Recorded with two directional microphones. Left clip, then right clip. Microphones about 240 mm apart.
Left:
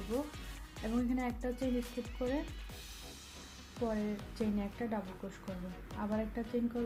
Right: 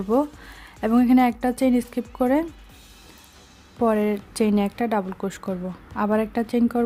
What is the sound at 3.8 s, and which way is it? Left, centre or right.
Speech, right.